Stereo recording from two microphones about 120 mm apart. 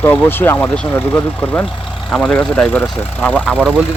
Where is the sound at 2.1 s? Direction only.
5° left (ahead or behind).